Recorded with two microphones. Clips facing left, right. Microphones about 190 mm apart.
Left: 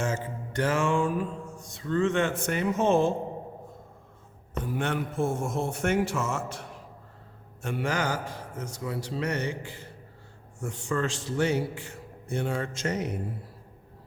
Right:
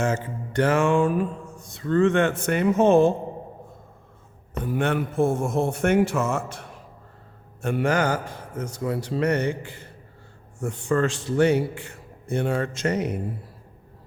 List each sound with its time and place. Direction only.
0.0 s mantra: 65° right (ahead or behind)
4.7 s mantra: 60° right (ahead or behind)